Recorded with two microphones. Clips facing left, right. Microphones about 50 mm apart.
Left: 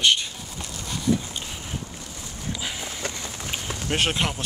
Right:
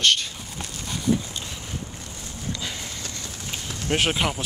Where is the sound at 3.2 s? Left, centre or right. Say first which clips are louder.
Left 2 dB; left.